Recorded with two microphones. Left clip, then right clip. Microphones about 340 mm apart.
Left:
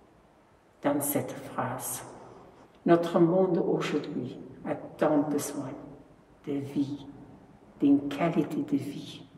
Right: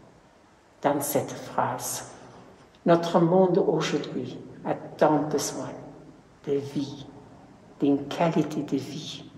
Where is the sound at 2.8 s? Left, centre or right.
Centre.